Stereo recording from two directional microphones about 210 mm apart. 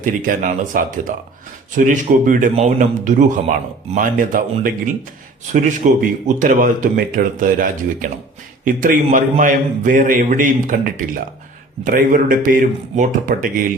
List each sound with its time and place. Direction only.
0.0 s a man's voice: 40° right (ahead or behind)